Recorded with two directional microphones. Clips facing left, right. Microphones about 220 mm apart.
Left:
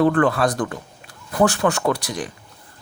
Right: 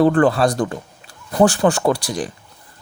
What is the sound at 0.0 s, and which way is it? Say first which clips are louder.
A man's voice: right 3 dB; 30° right (ahead or behind).